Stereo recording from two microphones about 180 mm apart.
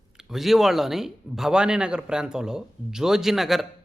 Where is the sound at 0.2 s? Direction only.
Centre (ahead or behind).